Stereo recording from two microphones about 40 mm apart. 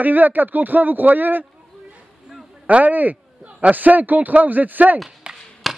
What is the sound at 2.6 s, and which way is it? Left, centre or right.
A man's voice, right.